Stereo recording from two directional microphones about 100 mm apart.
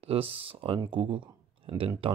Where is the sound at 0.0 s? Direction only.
75° right (ahead or behind).